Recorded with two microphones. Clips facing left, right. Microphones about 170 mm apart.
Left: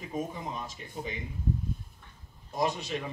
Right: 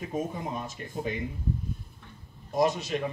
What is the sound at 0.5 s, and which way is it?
Speech, 50° right (ahead or behind).